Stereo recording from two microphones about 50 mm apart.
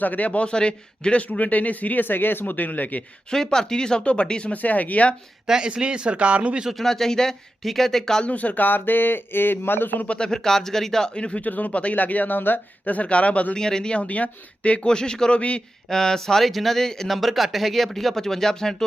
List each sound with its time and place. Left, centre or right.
0.0 s a man's voice: left
3.2 s speech: centre
4.5 s a man's voice: left
5.5 s speech: centre
6.7 s speech: centre
8.2 s a man's voice: left
10.2 s speech: centre
11.1 s speech: left
11.4 s a man's voice: left
13.6 s speech: centre
15.9 s speech: centre